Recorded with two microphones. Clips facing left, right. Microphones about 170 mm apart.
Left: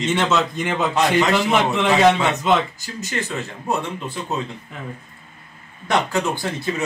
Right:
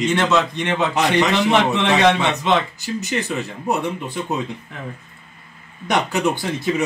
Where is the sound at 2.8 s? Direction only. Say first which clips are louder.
Right 4 dB; 20° right (ahead or behind).